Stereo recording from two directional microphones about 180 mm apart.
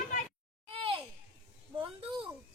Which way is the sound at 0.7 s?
30° right (ahead or behind).